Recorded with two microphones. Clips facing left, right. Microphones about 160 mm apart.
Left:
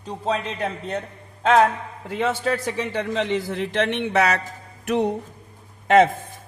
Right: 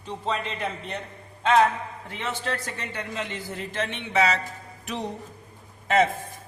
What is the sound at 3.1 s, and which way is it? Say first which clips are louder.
A woman's voice: left 9 dB; 80° left.